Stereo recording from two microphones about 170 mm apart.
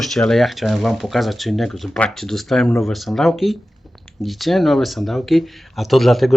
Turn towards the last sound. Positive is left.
turn(degrees=0)  # may be behind; listen again after turning